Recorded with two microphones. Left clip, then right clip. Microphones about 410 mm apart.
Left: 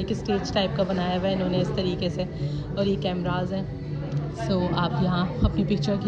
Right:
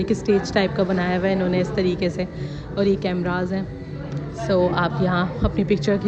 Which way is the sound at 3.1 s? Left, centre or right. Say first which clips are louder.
Right 4 dB; right.